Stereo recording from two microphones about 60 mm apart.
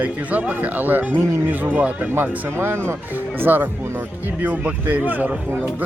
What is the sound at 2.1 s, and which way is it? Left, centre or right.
Speech, right.